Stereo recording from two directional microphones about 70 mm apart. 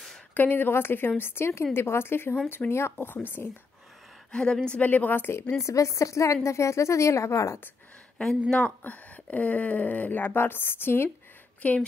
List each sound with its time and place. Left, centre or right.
0.3 s speech: left
4.3 s a woman's voice: centre
4.7 s speech: left
5.6 s a woman's voice: left
8.2 s speech: centre; by 11.1 s left
11.6 s speech: left